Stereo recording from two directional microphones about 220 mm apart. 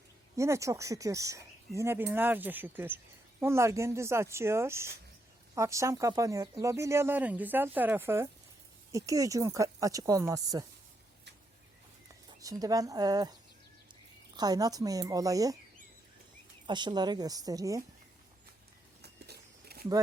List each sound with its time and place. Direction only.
0.3 s speech: 15° right (ahead or behind)
12.3 s speech: 15° right (ahead or behind)
14.3 s speech: 15° right (ahead or behind)
16.6 s speech: 20° right (ahead or behind)
19.0 s a sound: 45° right (ahead or behind)